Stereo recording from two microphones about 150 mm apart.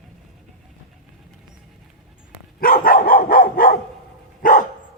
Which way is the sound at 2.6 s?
70° left (ahead or behind).